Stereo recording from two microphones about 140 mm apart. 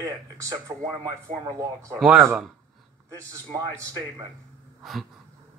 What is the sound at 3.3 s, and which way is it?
Speech, 25° right (ahead or behind).